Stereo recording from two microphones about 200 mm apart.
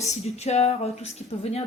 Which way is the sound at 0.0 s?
35° left (ahead or behind).